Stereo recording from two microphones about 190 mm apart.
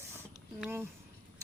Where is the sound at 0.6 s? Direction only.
10° right (ahead or behind).